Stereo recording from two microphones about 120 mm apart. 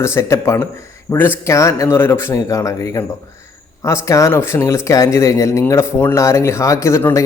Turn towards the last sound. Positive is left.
turn(degrees=25)  # may be behind; listen again after turning